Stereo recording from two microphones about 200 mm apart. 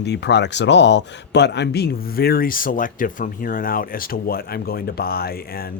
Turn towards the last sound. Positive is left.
turn(degrees=50)  # may be behind; listen again after turning